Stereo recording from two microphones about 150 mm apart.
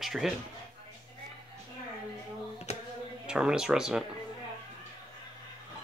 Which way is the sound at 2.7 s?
50° left (ahead or behind).